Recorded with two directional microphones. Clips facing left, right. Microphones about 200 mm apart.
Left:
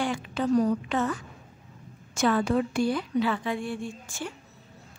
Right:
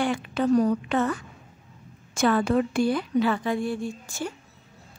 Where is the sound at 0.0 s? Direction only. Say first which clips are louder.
Right 3 dB; 60° right (ahead or behind); by 4.3 s 40° right (ahead or behind).